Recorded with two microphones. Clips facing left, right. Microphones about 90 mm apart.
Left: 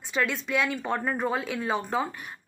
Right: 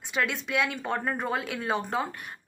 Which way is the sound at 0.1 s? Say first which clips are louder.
Left 1 dB; 5° right (ahead or behind).